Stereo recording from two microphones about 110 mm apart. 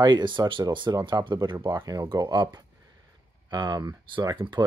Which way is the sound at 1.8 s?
35° right (ahead or behind).